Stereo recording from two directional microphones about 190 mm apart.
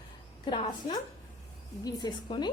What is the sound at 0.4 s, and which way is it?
A woman's voice, 25° left (ahead or behind).